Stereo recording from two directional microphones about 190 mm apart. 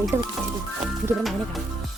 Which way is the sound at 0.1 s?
10° right (ahead or behind).